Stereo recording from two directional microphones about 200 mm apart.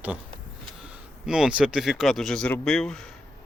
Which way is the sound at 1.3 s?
5° right (ahead or behind).